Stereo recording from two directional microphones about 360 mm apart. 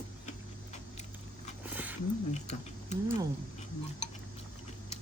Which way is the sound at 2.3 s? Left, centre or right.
Centre.